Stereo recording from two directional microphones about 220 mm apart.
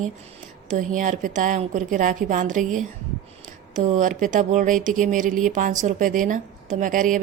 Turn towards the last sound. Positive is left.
turn(degrees=-35)  # may be behind; listen again after turning